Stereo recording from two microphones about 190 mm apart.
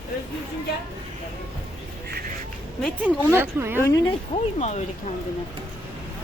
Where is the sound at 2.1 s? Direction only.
50° right (ahead or behind).